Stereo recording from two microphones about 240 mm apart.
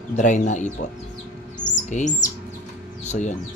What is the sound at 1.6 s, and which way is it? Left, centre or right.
Bird, left.